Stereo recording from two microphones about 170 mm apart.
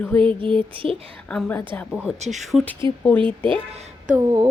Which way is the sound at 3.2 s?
30° right (ahead or behind).